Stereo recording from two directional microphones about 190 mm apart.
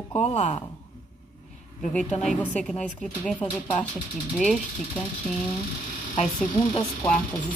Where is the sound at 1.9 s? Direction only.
5° left (ahead or behind).